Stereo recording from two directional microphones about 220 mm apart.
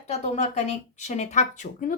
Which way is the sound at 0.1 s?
30° left (ahead or behind).